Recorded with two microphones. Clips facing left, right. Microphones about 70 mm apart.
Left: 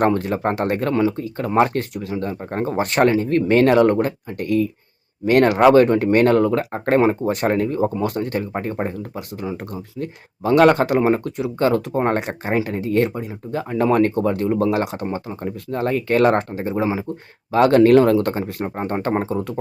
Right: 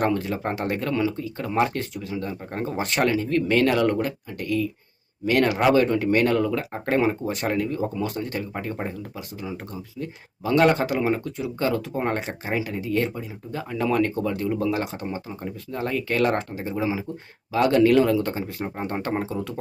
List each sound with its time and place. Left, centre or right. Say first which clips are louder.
0.0 s speech: left 5 dB; left